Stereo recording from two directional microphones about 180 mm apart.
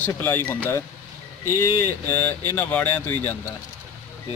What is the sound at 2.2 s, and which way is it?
A man's voice, 10° left (ahead or behind).